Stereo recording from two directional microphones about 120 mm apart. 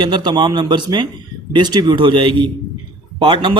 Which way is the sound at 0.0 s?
40° right (ahead or behind).